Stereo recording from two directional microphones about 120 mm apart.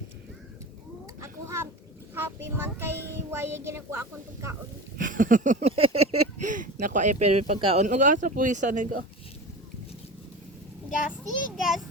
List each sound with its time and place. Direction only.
1.2 s a sound: 25° right (ahead or behind)
2.1 s child singing: 20° right (ahead or behind)
4.9 s a sound: 90° right; by 6.1 s 55° right (ahead or behind)
6.4 s speech: 90° right
7.5 s speech: 55° right (ahead or behind)
7.9 s speech: 90° right
11.2 s a child's voice: centre (ahead or behind)